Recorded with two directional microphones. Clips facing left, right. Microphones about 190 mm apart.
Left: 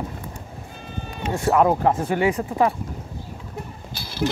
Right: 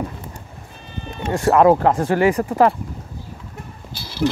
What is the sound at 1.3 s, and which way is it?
Speech, 75° right (ahead or behind).